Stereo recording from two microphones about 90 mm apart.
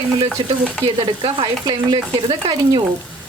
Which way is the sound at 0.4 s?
50° right (ahead or behind).